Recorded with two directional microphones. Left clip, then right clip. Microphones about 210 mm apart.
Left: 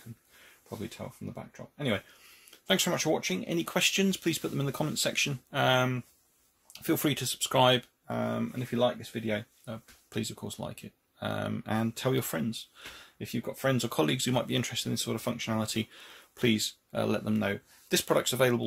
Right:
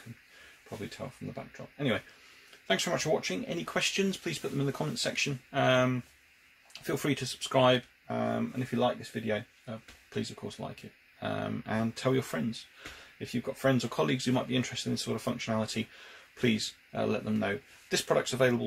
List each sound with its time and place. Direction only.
1.0 s speech: 40° left (ahead or behind)
2.6 s speech: 50° left (ahead or behind)